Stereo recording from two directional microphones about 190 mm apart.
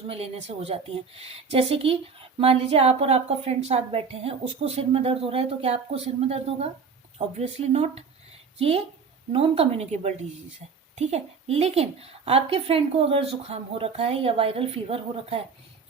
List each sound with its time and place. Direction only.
0.1 s a woman's voice: 30° right (ahead or behind)